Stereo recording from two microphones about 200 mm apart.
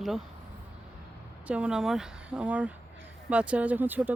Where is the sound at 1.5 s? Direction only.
5° right (ahead or behind).